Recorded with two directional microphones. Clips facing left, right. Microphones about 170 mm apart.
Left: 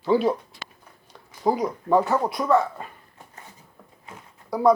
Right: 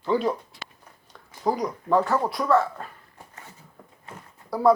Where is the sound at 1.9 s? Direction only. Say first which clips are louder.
Left 1 dB; 20° left (ahead or behind).